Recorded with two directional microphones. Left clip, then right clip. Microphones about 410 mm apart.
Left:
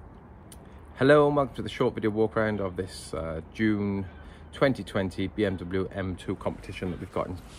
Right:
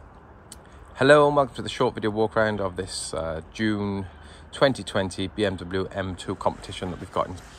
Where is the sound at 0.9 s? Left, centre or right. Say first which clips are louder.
Right 4 dB; centre.